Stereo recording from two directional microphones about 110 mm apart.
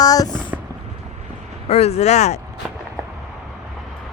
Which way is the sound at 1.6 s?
70° left (ahead or behind).